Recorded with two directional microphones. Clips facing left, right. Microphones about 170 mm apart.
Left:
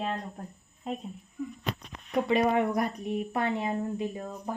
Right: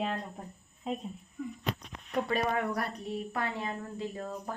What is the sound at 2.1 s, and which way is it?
Speech, 10° left (ahead or behind).